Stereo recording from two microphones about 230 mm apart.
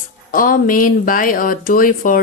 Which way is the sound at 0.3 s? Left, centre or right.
Left.